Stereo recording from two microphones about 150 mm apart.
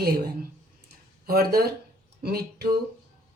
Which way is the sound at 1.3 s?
85° right.